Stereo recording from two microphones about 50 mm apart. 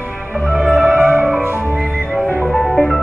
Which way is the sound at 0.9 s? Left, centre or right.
Right.